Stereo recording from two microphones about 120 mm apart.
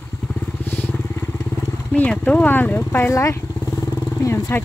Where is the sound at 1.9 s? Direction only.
10° left (ahead or behind).